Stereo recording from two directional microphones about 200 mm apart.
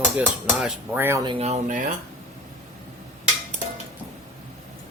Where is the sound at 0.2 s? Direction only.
10° right (ahead or behind).